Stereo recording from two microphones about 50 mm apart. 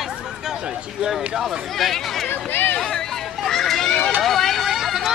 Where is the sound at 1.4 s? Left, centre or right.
Centre.